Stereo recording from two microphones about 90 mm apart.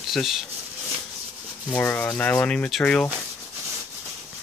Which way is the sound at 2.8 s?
10° left (ahead or behind).